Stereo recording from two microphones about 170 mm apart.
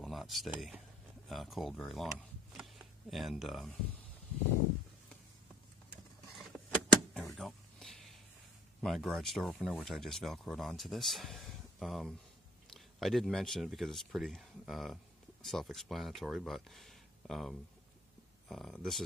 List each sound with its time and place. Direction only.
0.0 s speech: centre (ahead or behind)
6.3 s a sound: centre (ahead or behind)
8.8 s speech: centre (ahead or behind)